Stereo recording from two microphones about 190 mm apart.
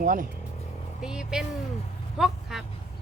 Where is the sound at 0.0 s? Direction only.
50° right (ahead or behind).